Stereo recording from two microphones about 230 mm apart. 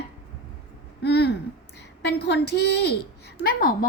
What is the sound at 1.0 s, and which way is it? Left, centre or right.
A woman's voice, left.